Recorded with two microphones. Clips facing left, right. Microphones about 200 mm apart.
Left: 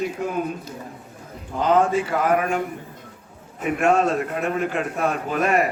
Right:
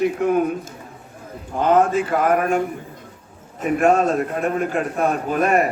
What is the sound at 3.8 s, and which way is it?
A man's voice, 45° right (ahead or behind).